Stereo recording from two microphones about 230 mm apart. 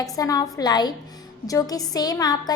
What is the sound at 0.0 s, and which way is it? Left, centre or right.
A woman's voice, centre.